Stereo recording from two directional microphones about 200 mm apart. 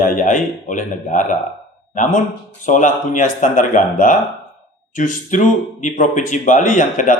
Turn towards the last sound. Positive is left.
turn(degrees=40)  # may be behind; listen again after turning